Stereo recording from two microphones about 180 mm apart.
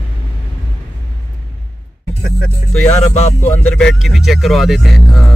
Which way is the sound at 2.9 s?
40° left (ahead or behind).